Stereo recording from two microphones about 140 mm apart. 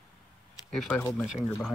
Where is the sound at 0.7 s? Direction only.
5° left (ahead or behind).